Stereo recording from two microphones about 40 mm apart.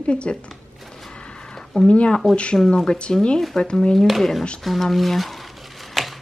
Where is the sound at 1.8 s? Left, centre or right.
Left.